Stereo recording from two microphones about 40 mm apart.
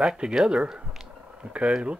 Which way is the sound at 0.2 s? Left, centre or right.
Right.